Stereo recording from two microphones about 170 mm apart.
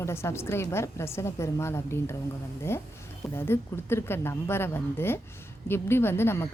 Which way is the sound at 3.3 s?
15° left (ahead or behind).